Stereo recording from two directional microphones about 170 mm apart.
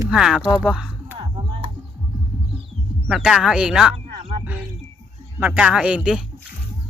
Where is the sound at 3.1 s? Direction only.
5° right (ahead or behind).